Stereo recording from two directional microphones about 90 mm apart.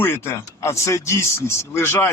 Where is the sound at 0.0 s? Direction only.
25° left (ahead or behind).